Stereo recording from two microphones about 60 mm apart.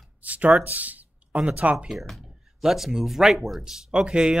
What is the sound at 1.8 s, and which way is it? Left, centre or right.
Speech, centre.